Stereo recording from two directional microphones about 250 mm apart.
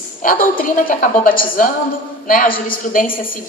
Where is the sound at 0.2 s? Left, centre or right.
Left.